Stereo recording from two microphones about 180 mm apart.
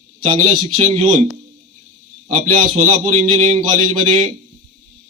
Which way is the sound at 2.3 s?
45° right (ahead or behind).